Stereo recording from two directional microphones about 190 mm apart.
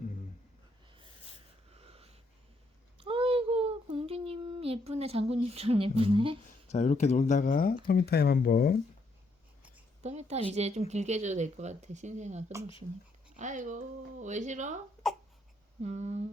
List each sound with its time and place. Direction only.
1.7 s snort: 30° right (ahead or behind)
3.0 s child singing: 30° right (ahead or behind)
6.7 s speech: 35° left (ahead or behind)
10.0 s speech: 35° right (ahead or behind)
15.8 s speech: 35° right (ahead or behind)